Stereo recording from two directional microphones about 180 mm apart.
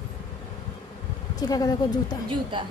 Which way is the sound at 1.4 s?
20° left (ahead or behind).